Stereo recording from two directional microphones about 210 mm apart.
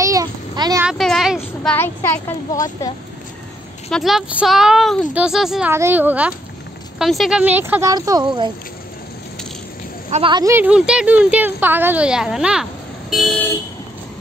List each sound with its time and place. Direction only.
0.0 s a sound: 15° right (ahead or behind)
0.8 s speech: centre (ahead or behind)
3.9 s speech: centre (ahead or behind); by 8.3 s 20° right (ahead or behind)
10.0 s speech: 25° right (ahead or behind); by 13.5 s centre (ahead or behind)